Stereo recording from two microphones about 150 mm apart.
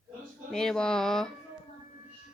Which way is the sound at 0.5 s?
5° left (ahead or behind).